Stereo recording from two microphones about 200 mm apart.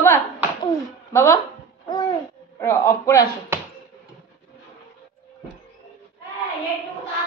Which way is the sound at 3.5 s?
10° right (ahead or behind).